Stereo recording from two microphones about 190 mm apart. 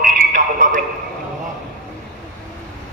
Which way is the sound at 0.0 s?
45° right (ahead or behind).